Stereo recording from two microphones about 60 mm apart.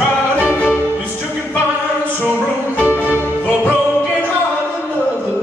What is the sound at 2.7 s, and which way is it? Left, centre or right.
Music, left.